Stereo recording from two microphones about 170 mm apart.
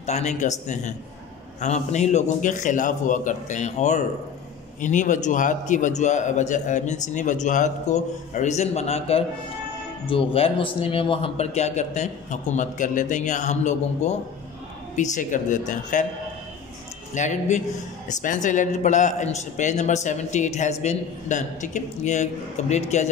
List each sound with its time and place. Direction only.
0.0 s a man's voice: 40° left (ahead or behind)
17.1 s a man's voice: 45° left (ahead or behind)